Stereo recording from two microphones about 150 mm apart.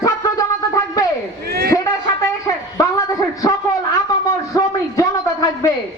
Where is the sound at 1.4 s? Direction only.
90° right.